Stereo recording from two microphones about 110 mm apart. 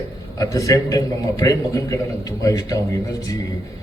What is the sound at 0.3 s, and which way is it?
A man's voice, 30° left (ahead or behind).